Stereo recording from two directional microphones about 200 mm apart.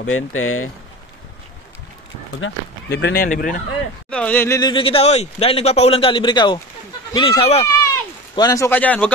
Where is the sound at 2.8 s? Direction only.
55° left (ahead or behind).